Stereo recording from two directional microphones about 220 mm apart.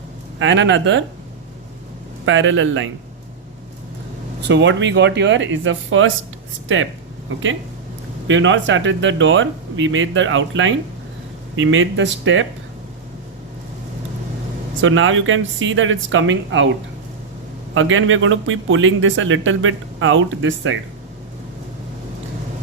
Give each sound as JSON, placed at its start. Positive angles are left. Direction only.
{"t": 0.3, "sound": "speech", "side_deg": -55}
{"t": 2.2, "sound": "speech", "side_deg": -60}
{"t": 4.4, "sound": "speech", "side_deg": -50}
{"t": 7.3, "sound": "speech", "side_deg": -60}
{"t": 14.8, "sound": "speech", "side_deg": -60}
{"t": 17.7, "sound": "speech", "side_deg": -65}